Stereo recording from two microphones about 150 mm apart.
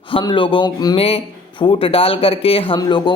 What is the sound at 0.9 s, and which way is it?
A man's voice, 40° left (ahead or behind).